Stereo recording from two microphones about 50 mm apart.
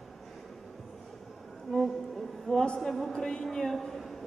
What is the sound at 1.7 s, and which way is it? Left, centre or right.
A woman's voice, centre.